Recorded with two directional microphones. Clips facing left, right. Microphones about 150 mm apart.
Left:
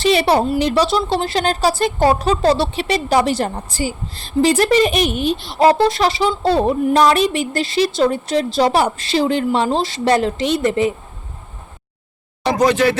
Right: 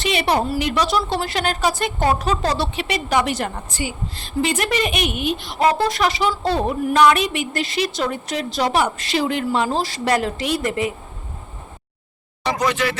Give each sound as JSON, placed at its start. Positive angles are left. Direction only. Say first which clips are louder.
{"t": 0.0, "sound": "a woman's voice", "louder": "left 5 dB", "side_deg": 35}
{"t": 12.5, "sound": "speech", "louder": "left 6 dB", "side_deg": 35}